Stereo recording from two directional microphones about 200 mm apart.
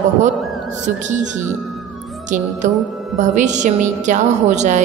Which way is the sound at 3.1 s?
35° right (ahead or behind).